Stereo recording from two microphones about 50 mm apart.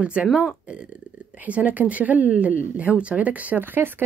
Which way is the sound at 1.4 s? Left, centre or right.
Right.